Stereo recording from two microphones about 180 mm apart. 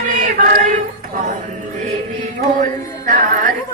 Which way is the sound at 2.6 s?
45° right (ahead or behind).